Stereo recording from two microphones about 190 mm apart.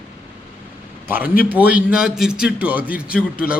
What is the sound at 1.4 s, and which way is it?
A man's voice, 10° right (ahead or behind).